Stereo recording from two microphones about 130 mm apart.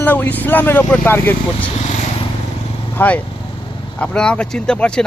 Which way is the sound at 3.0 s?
15° left (ahead or behind).